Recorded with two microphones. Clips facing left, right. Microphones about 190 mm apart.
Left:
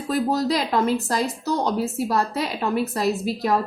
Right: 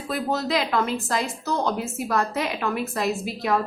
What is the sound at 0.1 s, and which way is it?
Speech, 40° left (ahead or behind).